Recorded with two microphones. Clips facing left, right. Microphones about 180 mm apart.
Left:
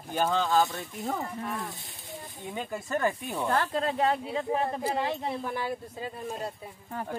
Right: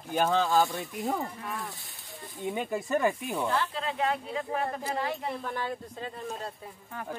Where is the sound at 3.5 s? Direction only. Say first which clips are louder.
Left 3 dB; 50° left (ahead or behind); by 5.2 s 30° left (ahead or behind).